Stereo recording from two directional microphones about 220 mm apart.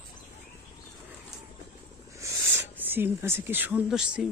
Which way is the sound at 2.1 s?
10° right (ahead or behind).